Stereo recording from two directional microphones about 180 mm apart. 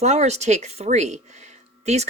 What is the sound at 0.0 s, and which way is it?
Speech, 40° right (ahead or behind).